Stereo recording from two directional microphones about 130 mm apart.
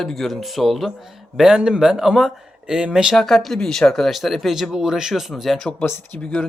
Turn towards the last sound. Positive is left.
turn(degrees=20)  # may be behind; listen again after turning